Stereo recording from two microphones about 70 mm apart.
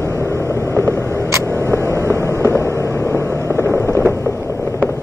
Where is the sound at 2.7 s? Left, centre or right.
Left.